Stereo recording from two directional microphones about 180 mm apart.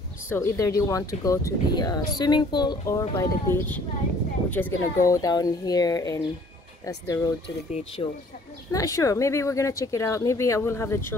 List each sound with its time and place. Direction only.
0.3 s speech: 15° left (ahead or behind)